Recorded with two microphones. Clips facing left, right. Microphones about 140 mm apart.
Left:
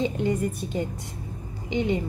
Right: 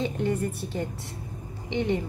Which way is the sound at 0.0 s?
15° left (ahead or behind).